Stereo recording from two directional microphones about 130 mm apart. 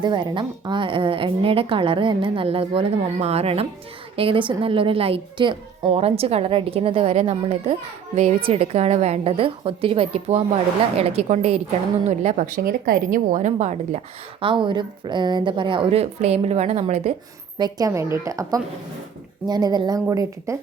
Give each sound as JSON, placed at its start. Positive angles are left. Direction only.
{"t": 0.0, "sound": "a woman's voice", "side_deg": -35}
{"t": 5.9, "sound": "a woman's voice", "side_deg": -50}
{"t": 12.0, "sound": "a woman's voice", "side_deg": -70}
{"t": 14.4, "sound": "a woman's voice", "side_deg": -40}
{"t": 17.6, "sound": "a woman's voice", "side_deg": -25}